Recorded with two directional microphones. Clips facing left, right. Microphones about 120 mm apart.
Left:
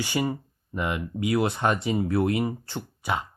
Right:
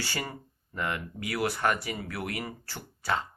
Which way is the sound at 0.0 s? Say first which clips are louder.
Left 9 dB; 15° left (ahead or behind).